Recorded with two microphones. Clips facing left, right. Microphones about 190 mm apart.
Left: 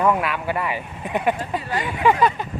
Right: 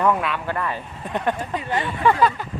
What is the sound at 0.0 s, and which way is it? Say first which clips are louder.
Speech: left 1 dB; 5° left (ahead or behind).